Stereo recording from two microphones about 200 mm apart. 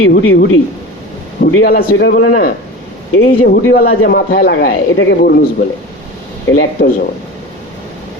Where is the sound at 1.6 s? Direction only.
55° left (ahead or behind).